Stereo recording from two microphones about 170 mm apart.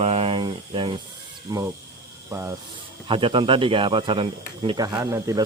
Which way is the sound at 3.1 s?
30° right (ahead or behind).